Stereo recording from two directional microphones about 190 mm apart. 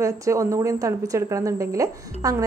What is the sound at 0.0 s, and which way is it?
A woman's voice, 15° right (ahead or behind).